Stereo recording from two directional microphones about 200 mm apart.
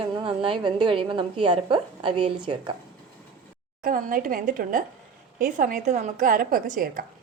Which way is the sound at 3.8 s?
45° right (ahead or behind).